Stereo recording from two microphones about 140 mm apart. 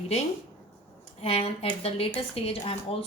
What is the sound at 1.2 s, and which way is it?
A woman's voice, 45° left (ahead or behind).